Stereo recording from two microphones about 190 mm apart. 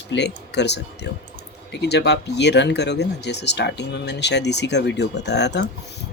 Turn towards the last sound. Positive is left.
turn(degrees=65)  # may be behind; listen again after turning